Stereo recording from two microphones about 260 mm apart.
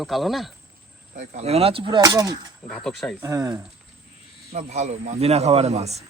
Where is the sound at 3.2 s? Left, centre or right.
Centre.